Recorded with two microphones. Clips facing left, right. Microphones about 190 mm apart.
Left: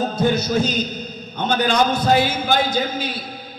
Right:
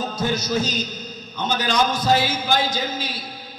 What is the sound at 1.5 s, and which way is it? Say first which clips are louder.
A man's voice: left 4 dB; 55° left (ahead or behind).